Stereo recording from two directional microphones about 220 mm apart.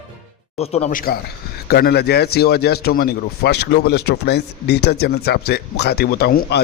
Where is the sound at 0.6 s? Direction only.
30° left (ahead or behind).